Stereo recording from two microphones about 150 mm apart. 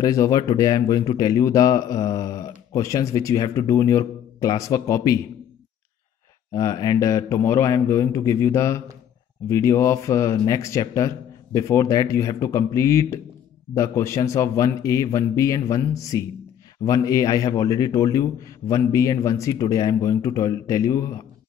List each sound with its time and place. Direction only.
0.0 s speech: 25° left (ahead or behind)
6.5 s speech: 25° left (ahead or behind)